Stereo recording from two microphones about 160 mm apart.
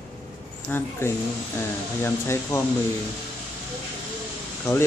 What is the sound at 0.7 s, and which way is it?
Speech, 10° left (ahead or behind).